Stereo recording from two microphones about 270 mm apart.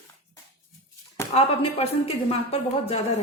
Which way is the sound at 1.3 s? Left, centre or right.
Left.